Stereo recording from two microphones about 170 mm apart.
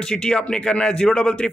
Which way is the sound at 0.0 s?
5° left (ahead or behind).